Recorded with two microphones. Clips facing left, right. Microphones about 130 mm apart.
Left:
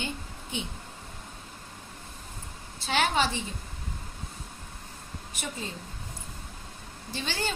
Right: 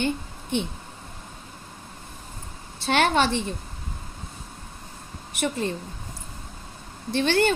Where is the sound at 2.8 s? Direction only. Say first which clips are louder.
Right 5 dB; 65° right (ahead or behind).